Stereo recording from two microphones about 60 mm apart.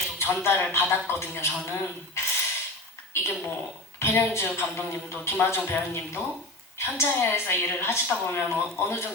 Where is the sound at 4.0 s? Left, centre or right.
Left.